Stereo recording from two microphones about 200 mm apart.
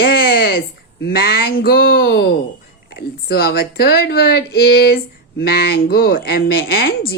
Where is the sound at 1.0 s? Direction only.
50° left (ahead or behind).